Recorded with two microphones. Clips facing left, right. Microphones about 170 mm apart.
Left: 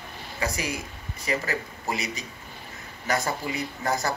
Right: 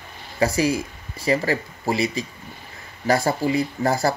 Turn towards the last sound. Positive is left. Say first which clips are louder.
# right 6 dB
turn(degrees=-35)  # may be behind; listen again after turning